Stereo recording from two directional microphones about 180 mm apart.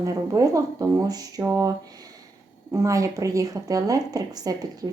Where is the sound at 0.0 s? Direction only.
20° right (ahead or behind).